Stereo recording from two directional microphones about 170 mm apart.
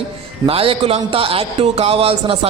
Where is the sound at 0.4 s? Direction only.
35° right (ahead or behind).